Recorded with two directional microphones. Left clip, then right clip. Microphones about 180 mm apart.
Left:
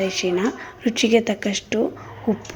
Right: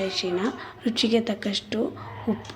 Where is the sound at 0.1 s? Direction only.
25° left (ahead or behind).